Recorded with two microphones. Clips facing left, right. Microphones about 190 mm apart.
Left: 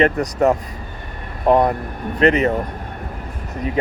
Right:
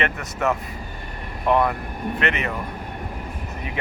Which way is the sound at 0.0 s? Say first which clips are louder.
Left 9 dB; 35° left (ahead or behind).